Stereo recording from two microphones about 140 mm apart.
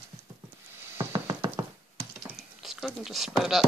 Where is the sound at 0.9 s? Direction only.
30° right (ahead or behind).